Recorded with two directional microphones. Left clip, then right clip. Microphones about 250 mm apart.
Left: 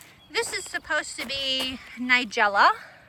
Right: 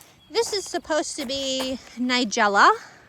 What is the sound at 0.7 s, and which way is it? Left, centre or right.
Speech, right.